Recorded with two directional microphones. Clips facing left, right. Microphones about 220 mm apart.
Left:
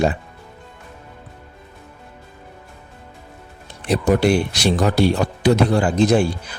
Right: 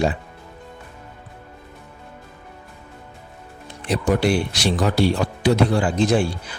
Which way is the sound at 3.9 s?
45° left (ahead or behind).